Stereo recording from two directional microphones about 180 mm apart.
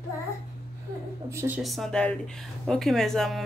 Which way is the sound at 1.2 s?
15° right (ahead or behind).